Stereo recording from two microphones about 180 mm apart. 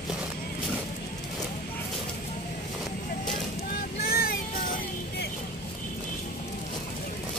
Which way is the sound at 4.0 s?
55° left (ahead or behind).